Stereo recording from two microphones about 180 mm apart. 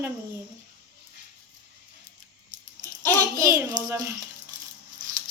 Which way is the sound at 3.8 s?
45° right (ahead or behind).